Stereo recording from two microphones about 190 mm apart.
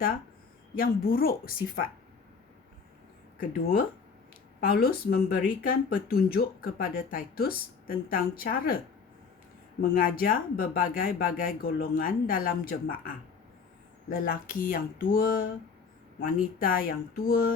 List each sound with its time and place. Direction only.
0.8 s speech: 50° left (ahead or behind)
3.3 s speech: 50° left (ahead or behind)
9.9 s speech: 50° left (ahead or behind)
14.1 s speech: 50° left (ahead or behind)